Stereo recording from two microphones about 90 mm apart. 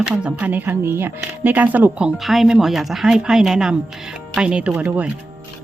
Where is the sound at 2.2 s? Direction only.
Centre (ahead or behind).